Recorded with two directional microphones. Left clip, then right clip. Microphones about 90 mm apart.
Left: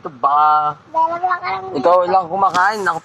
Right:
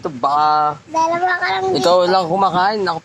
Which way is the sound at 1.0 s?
30° right (ahead or behind).